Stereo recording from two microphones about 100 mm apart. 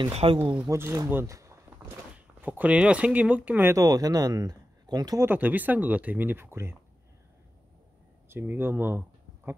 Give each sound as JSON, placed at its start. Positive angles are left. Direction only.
{"t": 0.1, "sound": "speech", "side_deg": -80}
{"t": 0.7, "sound": "speech", "side_deg": -30}
{"t": 2.1, "sound": "speech", "side_deg": -15}
{"t": 3.7, "sound": "speech", "side_deg": -40}
{"t": 5.2, "sound": "speech", "side_deg": -20}
{"t": 8.3, "sound": "speech", "side_deg": -20}